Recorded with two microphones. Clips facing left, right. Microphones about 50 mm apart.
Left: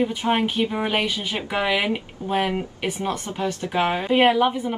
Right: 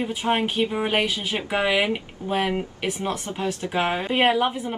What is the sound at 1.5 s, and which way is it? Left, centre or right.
Speech, centre.